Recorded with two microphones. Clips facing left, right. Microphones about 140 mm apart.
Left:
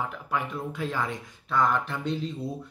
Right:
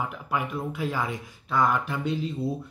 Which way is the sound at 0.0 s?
10° right (ahead or behind).